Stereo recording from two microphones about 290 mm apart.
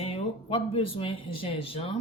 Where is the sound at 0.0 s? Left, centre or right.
Centre.